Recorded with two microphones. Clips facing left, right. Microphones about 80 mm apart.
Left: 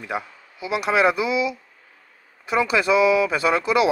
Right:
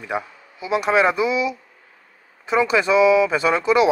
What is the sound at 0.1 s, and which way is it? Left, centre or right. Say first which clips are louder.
Speech: right 3 dB; right.